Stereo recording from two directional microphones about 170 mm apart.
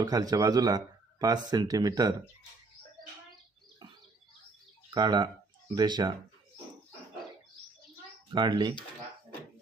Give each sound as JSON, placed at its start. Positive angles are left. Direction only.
{"t": 0.0, "sound": "speech", "side_deg": -20}
{"t": 4.9, "sound": "speech", "side_deg": -25}
{"t": 8.3, "sound": "speech", "side_deg": -25}